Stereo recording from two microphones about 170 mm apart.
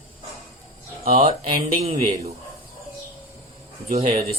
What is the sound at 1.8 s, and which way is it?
Speech, 40° right (ahead or behind).